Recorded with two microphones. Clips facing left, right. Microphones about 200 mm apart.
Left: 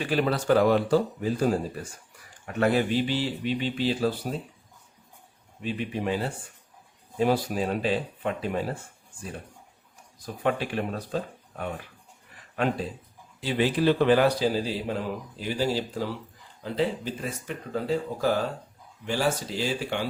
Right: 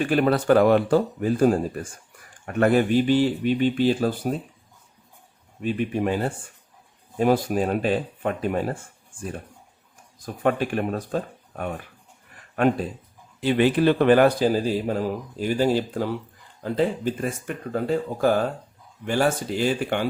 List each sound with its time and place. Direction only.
0.0 s a man's voice: 55° right (ahead or behind)
5.6 s a man's voice: 50° right (ahead or behind)
10.2 s a man's voice: 50° right (ahead or behind)